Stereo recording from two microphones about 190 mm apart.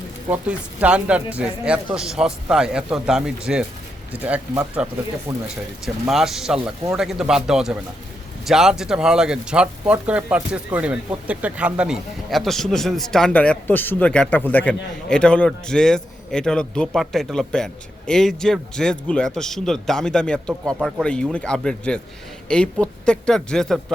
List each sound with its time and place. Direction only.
0.3 s speech: 5° right (ahead or behind)
5.3 s speech: 20° right (ahead or behind)
5.8 s speech: centre (ahead or behind)